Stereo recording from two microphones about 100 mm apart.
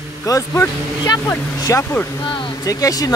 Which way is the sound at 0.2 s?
35° left (ahead or behind).